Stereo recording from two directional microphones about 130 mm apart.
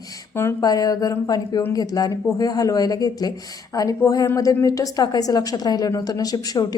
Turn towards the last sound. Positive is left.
turn(degrees=30)  # may be behind; listen again after turning